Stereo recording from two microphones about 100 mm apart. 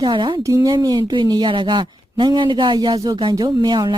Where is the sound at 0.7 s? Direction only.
40° right (ahead or behind).